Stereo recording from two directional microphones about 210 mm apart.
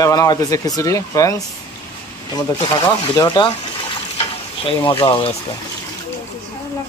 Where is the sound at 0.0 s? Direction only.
15° left (ahead or behind).